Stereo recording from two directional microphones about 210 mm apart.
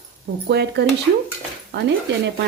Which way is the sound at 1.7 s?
55° right (ahead or behind).